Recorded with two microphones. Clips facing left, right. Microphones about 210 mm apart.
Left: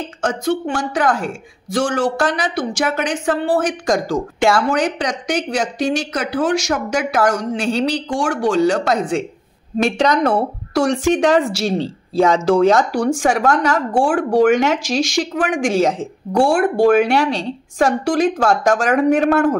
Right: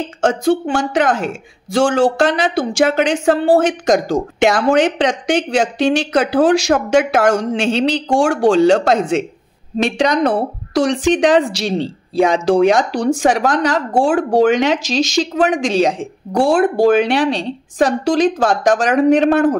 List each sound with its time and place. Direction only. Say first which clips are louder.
0.2 s a woman's voice: right 5 dB; 25° right (ahead or behind)